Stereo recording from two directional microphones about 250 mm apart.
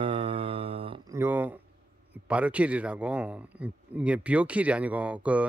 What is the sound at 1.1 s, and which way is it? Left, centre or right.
Speech, centre.